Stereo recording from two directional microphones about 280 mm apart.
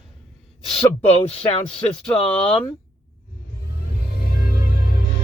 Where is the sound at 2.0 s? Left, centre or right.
Centre.